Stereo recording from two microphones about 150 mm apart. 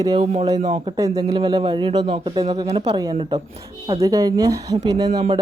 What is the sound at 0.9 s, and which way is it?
Speech, 25° right (ahead or behind).